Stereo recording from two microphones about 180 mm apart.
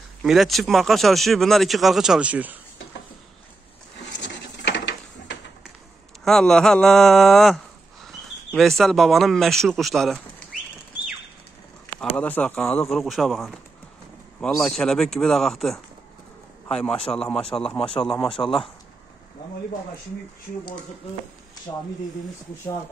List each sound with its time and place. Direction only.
0.2 s speech: centre (ahead or behind)
4.0 s wood: 75° left (ahead or behind)
6.2 s speech: 5° left (ahead or behind)
12.0 s speech: 10° left (ahead or behind)
14.6 s a man's voice: 5° left (ahead or behind)
17.7 s speech: 30° left (ahead or behind)